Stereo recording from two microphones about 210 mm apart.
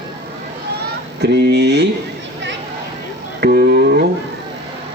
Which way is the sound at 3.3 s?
50° right (ahead or behind).